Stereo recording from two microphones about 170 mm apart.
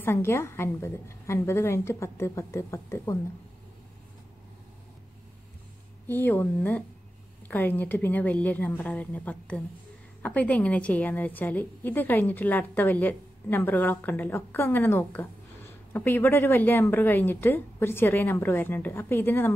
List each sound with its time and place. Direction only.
0.0 s a woman's voice: 15° left (ahead or behind)
6.0 s a woman's voice: 10° left (ahead or behind)